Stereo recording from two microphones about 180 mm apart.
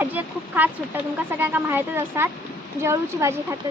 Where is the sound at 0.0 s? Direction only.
10° right (ahead or behind).